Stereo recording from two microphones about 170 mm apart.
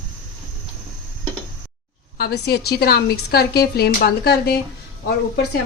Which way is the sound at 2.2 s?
70° left (ahead or behind).